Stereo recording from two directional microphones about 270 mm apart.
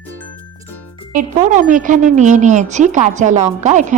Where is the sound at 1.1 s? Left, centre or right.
Right.